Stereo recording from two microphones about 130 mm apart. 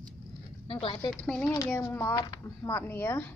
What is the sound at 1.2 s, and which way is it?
Speech, 5° left (ahead or behind).